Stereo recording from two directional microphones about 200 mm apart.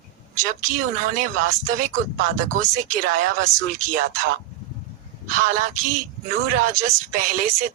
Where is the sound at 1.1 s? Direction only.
40° right (ahead or behind).